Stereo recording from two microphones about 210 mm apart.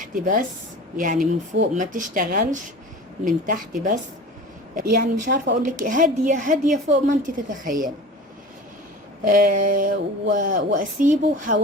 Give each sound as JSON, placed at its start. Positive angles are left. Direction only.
{"t": 0.0, "sound": "speech", "side_deg": -40}
{"t": 9.2, "sound": "speech", "side_deg": -40}